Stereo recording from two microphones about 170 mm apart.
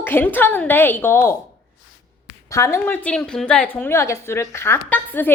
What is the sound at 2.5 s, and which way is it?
A woman's voice, 15° left (ahead or behind).